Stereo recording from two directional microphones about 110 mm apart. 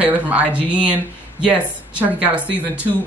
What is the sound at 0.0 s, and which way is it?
Speech, 15° right (ahead or behind).